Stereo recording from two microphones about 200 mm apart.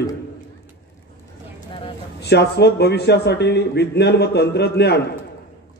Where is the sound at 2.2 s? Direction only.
55° left (ahead or behind).